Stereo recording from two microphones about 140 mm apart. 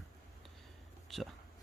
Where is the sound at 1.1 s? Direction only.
Centre (ahead or behind).